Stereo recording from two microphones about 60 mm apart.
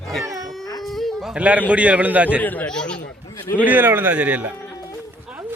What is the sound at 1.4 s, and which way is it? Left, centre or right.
Speech, right.